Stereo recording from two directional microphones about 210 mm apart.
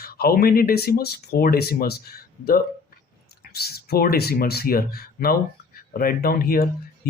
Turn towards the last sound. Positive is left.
turn(degrees=45)  # may be behind; listen again after turning